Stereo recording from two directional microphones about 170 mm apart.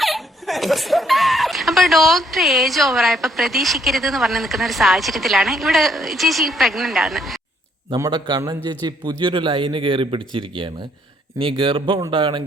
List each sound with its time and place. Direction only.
0.0 s speech: centre (ahead or behind)
7.9 s a man's voice: 25° right (ahead or behind)